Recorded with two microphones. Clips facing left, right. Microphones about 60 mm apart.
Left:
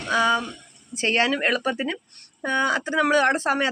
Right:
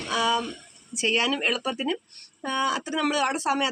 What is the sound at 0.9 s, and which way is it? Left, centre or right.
Speech, left.